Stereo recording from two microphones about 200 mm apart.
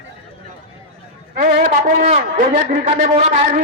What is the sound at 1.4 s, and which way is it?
A man's voice, 40° right (ahead or behind).